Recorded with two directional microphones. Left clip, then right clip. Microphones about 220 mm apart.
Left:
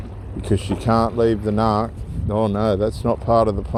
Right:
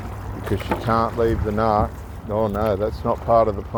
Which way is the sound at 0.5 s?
50° left (ahead or behind).